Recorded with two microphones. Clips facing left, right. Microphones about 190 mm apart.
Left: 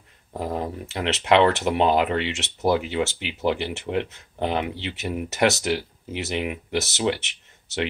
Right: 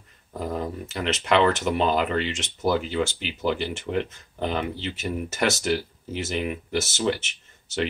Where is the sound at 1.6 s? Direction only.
15° left (ahead or behind).